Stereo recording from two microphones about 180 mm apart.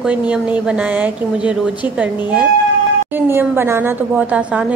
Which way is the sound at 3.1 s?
10° right (ahead or behind).